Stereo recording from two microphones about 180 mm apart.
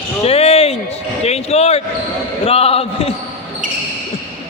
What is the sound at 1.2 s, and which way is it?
A man's voice, 35° left (ahead or behind).